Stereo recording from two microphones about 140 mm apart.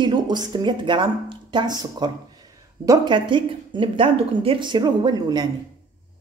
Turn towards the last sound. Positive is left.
turn(degrees=-30)  # may be behind; listen again after turning